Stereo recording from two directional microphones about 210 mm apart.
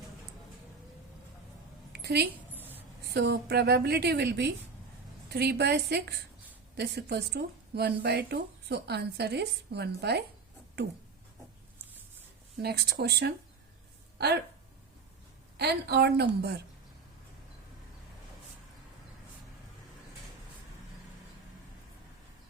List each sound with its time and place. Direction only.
1.9 s a sound: 50° right (ahead or behind)
3.0 s speech: 50° right (ahead or behind)
12.6 s speech: 50° right (ahead or behind)
15.5 s speech: 50° right (ahead or behind)